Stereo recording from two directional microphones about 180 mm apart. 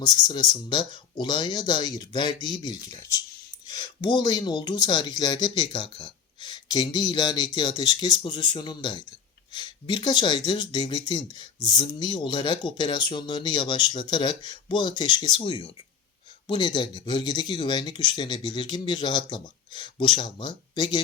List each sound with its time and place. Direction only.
0.0 s speech: 25° left (ahead or behind)